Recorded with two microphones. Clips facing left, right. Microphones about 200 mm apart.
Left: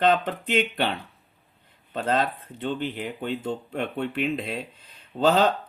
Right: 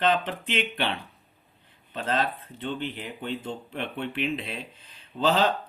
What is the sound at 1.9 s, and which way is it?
Speech, 45° left (ahead or behind).